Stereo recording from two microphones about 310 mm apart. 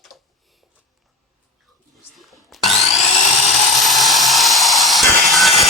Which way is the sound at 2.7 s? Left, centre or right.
Left.